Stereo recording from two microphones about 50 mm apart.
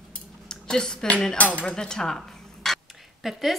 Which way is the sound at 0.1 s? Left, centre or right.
Centre.